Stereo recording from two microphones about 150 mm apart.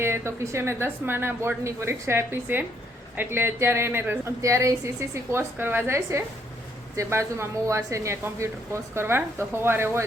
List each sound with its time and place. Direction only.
0.0 s speech: 15° right (ahead or behind)